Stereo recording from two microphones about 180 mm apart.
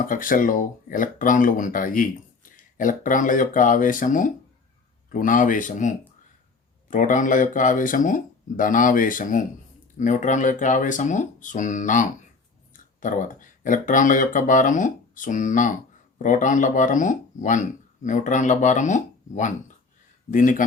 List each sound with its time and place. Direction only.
0.1 s speech: 50° left (ahead or behind)
6.9 s speech: 45° left (ahead or behind)